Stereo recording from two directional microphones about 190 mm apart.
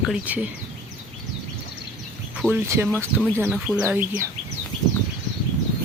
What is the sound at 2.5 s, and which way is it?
Speech, 10° right (ahead or behind).